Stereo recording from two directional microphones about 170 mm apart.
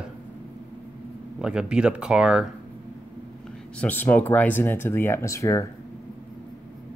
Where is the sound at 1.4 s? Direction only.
5° right (ahead or behind).